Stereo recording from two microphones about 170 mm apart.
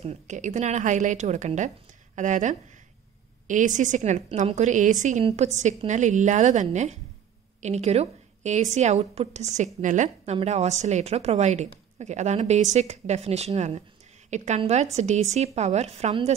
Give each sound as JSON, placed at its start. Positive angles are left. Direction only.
{"t": 0.0, "sound": "a woman's voice", "side_deg": -40}